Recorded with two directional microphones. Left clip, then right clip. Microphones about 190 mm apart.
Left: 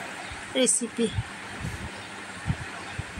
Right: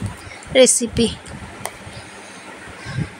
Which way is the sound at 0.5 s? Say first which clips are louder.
Right 13 dB; 20° right (ahead or behind).